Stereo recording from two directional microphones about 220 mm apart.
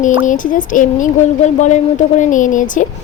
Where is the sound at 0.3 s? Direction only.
35° left (ahead or behind).